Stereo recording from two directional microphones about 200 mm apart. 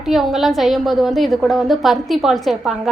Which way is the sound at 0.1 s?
Centre (ahead or behind).